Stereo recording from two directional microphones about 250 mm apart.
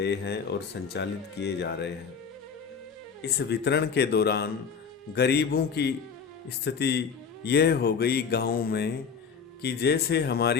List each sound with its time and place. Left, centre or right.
0.0 s speech: left
3.3 s music: left